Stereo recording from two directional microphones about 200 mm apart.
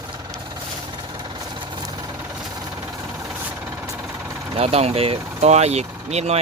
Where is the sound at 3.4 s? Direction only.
10° right (ahead or behind).